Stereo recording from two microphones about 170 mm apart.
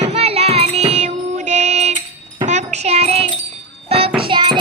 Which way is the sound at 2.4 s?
45° right (ahead or behind).